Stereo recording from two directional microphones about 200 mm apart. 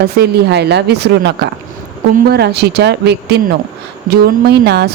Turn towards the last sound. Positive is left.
turn(degrees=-55)  # may be behind; listen again after turning